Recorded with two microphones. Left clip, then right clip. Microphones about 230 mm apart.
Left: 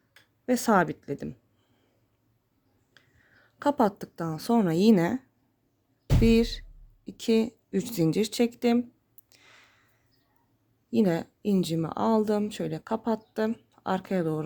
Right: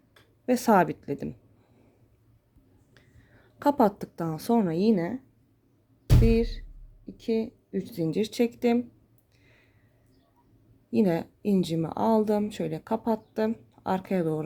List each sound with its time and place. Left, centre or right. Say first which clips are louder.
0.4 s speech: right 2 dB; centre
2.9 s speech: left 1 dB; centre; by 5.2 s left
6.2 s speech: left 3 dB; left
9.3 s a sound: left 7 dB; left
10.9 s speech: even; centre